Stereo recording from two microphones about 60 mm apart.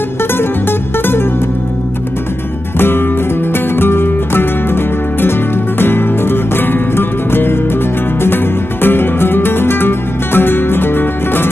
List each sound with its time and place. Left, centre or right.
0.4 s music: left
3.7 s music: left
5.8 s music: left
8.8 s music: left